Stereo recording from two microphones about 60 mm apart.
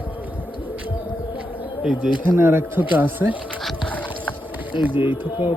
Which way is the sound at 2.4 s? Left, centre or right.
Right.